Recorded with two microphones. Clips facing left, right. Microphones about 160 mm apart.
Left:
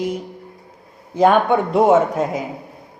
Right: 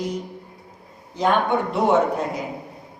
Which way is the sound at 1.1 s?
50° left (ahead or behind).